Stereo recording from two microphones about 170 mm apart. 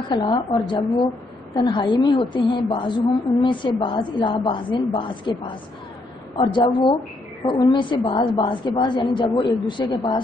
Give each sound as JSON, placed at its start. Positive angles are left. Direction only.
{"t": 0.1, "sound": "a woman's voice", "side_deg": 25}